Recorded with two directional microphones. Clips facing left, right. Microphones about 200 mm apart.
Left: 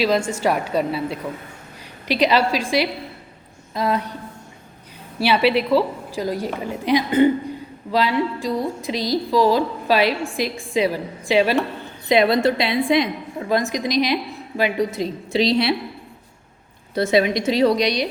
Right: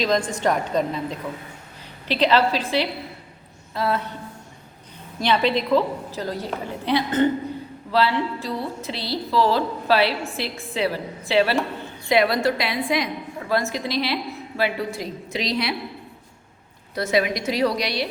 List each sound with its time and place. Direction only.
0.0 s a woman's voice: 10° left (ahead or behind)
5.2 s a woman's voice: 10° left (ahead or behind); by 15.7 s 30° left (ahead or behind)
16.9 s a woman's voice: 25° left (ahead or behind)